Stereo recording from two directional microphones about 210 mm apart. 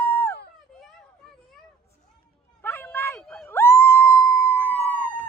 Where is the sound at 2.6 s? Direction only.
10° left (ahead or behind).